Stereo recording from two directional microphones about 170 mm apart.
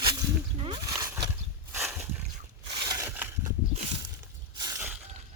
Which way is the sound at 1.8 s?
10° right (ahead or behind).